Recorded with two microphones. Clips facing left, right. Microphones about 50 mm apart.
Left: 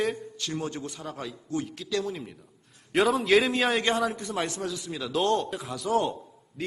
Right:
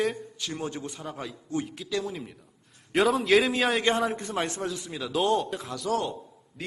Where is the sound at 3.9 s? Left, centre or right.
Right.